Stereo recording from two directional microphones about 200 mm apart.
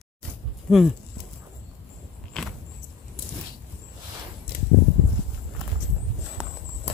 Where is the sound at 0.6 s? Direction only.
Centre (ahead or behind).